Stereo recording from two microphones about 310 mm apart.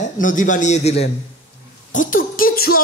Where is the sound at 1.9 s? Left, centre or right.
Left.